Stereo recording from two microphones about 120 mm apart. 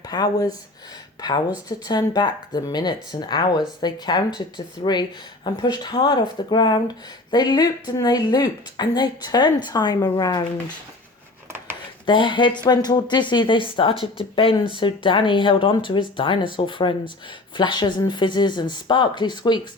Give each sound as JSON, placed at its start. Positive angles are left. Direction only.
{"t": 0.1, "sound": "speech", "side_deg": 30}
{"t": 12.0, "sound": "speech", "side_deg": 40}